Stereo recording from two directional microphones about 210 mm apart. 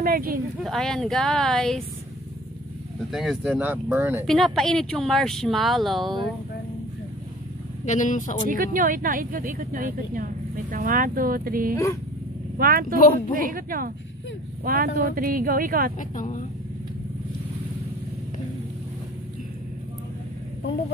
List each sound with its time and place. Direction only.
0.0 s a sound: 45° right (ahead or behind)
0.7 s speech: centre (ahead or behind)
3.1 s speech: centre (ahead or behind)
4.3 s speech: centre (ahead or behind)
7.8 s speech: 35° left (ahead or behind)
8.5 s a woman's voice: 40° right (ahead or behind)
11.7 s speech: 15° left (ahead or behind)
12.5 s speech: 45° right (ahead or behind)
12.9 s speech: 40° left (ahead or behind)
13.4 s a woman's voice: 40° right (ahead or behind)
16.0 s speech: 40° left (ahead or behind)